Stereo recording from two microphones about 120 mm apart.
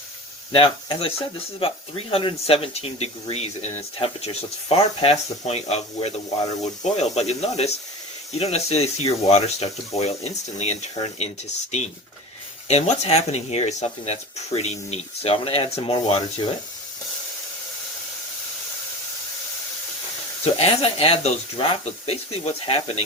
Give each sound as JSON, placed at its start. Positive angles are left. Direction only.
{"t": 0.5, "sound": "speech", "side_deg": 50}
{"t": 20.4, "sound": "speech", "side_deg": 55}